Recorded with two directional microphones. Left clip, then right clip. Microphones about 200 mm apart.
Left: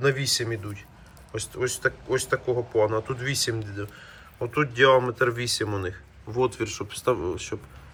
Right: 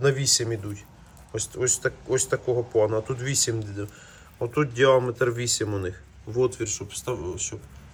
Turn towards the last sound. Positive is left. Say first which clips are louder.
# left 5 dB
turn(degrees=5)  # may be behind; listen again after turning